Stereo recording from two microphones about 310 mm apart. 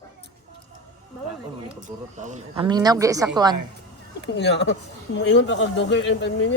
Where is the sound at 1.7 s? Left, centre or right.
Right.